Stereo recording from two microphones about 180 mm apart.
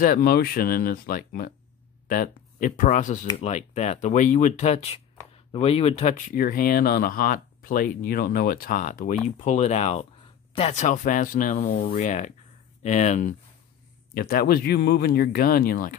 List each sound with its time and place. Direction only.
0.0 s speech: 55° left (ahead or behind)
14.1 s speech: 55° left (ahead or behind)